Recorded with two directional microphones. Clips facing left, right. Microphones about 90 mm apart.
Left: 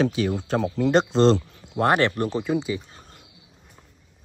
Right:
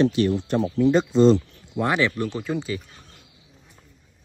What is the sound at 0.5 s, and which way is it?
Speech, 90° left.